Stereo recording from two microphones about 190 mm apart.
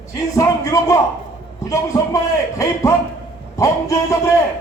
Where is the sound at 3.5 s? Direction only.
15° left (ahead or behind).